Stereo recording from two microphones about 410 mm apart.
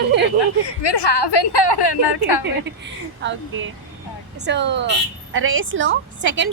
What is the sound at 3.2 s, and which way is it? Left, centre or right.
A woman's voice, right.